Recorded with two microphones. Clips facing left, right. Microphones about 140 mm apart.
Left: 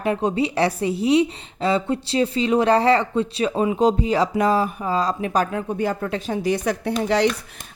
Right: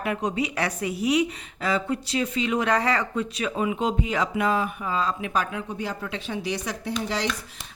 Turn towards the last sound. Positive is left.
turn(degrees=60)  # may be behind; listen again after turning